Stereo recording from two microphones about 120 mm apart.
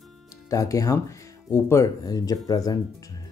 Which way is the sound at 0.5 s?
30° left (ahead or behind).